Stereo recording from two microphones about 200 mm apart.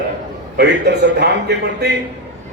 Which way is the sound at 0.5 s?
60° right (ahead or behind).